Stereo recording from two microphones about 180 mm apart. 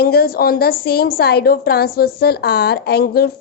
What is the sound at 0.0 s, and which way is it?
A woman's voice, 60° left (ahead or behind).